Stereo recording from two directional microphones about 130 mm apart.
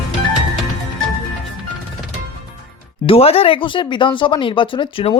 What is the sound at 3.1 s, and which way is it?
Speech, 50° left (ahead or behind).